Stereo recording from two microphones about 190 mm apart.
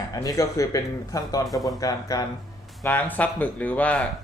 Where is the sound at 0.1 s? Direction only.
20° left (ahead or behind).